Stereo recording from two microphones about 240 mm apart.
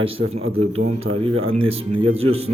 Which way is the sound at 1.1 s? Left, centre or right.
Right.